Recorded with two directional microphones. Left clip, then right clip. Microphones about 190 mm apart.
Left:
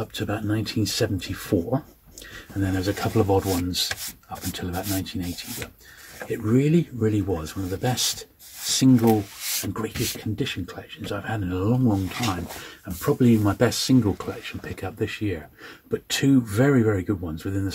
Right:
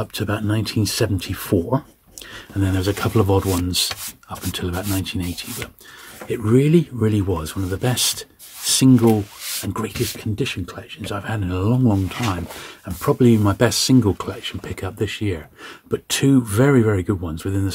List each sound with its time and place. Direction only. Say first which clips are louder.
0.0 s speech: right 4 dB; 40° right (ahead or behind)
13.0 s speech: right 4 dB; 30° right (ahead or behind)